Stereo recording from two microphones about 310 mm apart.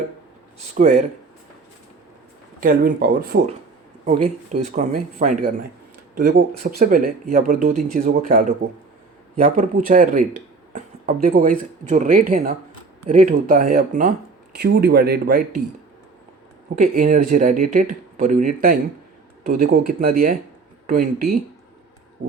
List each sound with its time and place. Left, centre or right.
0.7 s speech: right
2.6 s speech: right
16.7 s speech: right